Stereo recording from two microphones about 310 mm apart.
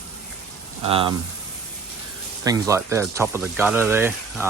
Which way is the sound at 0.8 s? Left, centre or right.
Centre.